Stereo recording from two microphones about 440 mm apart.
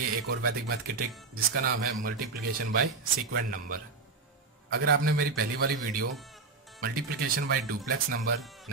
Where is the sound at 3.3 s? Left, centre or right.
Centre.